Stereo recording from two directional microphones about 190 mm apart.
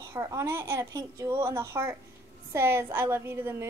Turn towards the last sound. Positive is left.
turn(degrees=-10)  # may be behind; listen again after turning